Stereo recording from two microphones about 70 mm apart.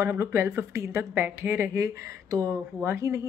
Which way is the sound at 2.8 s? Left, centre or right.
Right.